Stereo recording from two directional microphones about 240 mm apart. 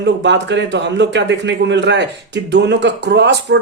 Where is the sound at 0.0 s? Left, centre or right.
Right.